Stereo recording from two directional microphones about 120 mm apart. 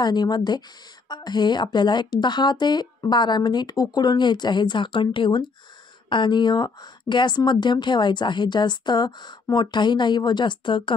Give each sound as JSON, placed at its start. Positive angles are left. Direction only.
{"t": 0.0, "sound": "a woman's voice", "side_deg": 35}